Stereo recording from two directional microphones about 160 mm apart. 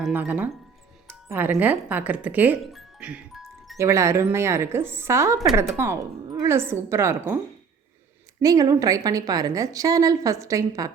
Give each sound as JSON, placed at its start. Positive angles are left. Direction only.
{"t": 0.0, "sound": "a woman's voice", "side_deg": -10}
{"t": 2.6, "sound": "music", "side_deg": -5}
{"t": 3.8, "sound": "a woman's voice", "side_deg": -20}
{"t": 8.4, "sound": "a woman's voice", "side_deg": -20}